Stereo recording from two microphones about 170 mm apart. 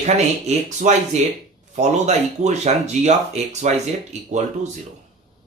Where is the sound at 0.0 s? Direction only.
45° right (ahead or behind).